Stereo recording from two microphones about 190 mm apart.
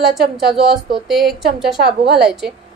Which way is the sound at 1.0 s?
Centre (ahead or behind).